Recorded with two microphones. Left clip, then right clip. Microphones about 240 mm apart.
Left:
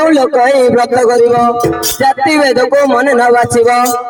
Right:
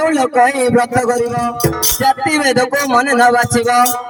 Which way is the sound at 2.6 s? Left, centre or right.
Left.